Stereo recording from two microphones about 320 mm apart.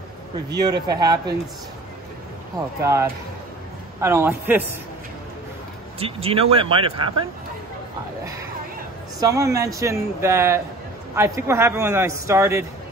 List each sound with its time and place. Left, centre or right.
0.5 s a man's voice: centre
2.8 s a man's voice: centre
5.9 s a man's voice: centre
9.2 s a man's voice: centre